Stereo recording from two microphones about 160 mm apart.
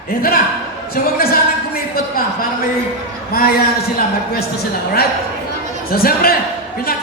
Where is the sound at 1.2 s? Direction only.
65° left (ahead or behind).